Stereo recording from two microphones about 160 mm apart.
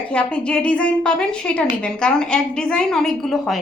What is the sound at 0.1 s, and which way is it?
A woman's voice, 10° left (ahead or behind).